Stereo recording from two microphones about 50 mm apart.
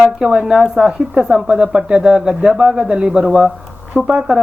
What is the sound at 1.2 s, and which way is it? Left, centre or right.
Speech, centre.